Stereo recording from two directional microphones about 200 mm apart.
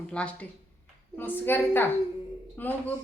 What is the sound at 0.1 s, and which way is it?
A woman's voice, 5° left (ahead or behind).